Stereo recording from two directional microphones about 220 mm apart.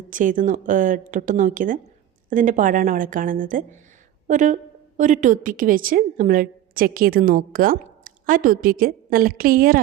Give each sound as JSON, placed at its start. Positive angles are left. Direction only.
{"t": 0.1, "sound": "a woman's voice", "side_deg": -35}